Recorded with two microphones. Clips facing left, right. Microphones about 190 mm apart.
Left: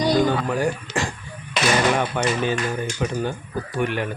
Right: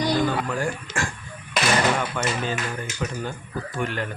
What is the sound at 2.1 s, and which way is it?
Speech, 20° left (ahead or behind).